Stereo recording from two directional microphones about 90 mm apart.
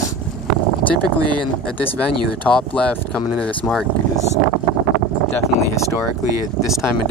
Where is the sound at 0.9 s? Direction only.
55° right (ahead or behind).